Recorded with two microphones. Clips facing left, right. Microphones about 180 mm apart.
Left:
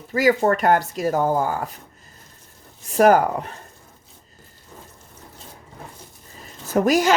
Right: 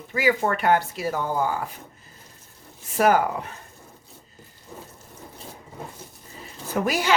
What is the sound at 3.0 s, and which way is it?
Speech, 45° left (ahead or behind).